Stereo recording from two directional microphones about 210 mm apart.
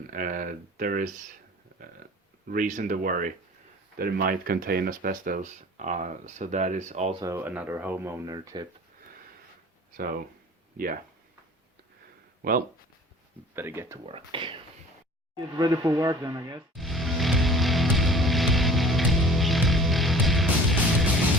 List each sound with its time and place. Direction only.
0.1 s speech: 40° right (ahead or behind)
2.5 s speech: 40° right (ahead or behind)
7.2 s speech: 15° right (ahead or behind)
12.4 s speech: 45° right (ahead or behind)
13.6 s speech: 10° right (ahead or behind)
14.1 s speech: 25° right (ahead or behind)
16.7 s music: centre (ahead or behind)